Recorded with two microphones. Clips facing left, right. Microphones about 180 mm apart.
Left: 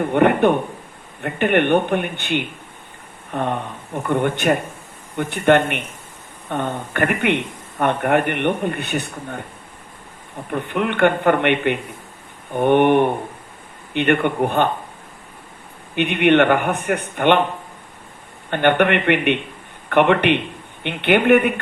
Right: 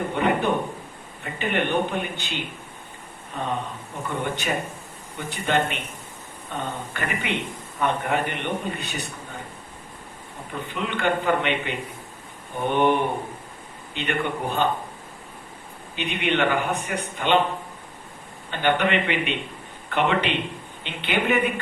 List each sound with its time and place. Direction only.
0.1 s a man's voice: 60° left (ahead or behind)
10.5 s a man's voice: 60° left (ahead or behind)
16.0 s a man's voice: 60° left (ahead or behind)
18.5 s a man's voice: 60° left (ahead or behind)